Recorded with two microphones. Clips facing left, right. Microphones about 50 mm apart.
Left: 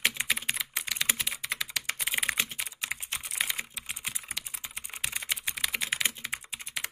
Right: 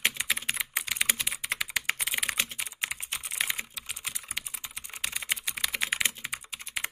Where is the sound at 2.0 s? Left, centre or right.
Centre.